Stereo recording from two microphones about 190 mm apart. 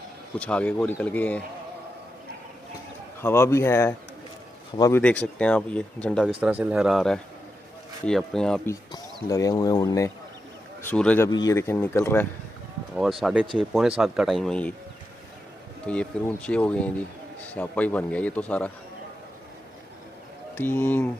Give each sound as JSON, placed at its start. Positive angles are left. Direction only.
{"t": 0.4, "sound": "speech", "side_deg": 5}
{"t": 3.2, "sound": "speech", "side_deg": 15}
{"t": 5.0, "sound": "speech", "side_deg": 5}
{"t": 6.4, "sound": "speech", "side_deg": -5}
{"t": 8.6, "sound": "speech", "side_deg": 20}
{"t": 11.2, "sound": "speech", "side_deg": 20}
{"t": 12.9, "sound": "speech", "side_deg": 0}
{"t": 15.9, "sound": "speech", "side_deg": 5}
{"t": 20.5, "sound": "speech", "side_deg": 10}